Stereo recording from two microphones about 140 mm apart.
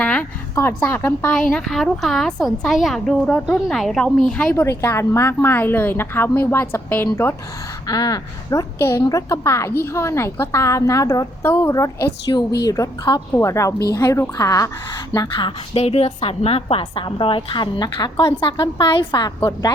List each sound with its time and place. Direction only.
0.0 s a sound: 10° left (ahead or behind)
0.8 s a woman's voice: 15° left (ahead or behind)
1.3 s a woman's voice: 5° left (ahead or behind)
7.9 s a woman's voice: 25° left (ahead or behind)
15.8 s a woman's voice: 45° left (ahead or behind); by 19.7 s 30° left (ahead or behind)